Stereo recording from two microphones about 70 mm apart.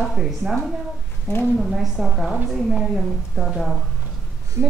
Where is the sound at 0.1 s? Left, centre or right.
Centre.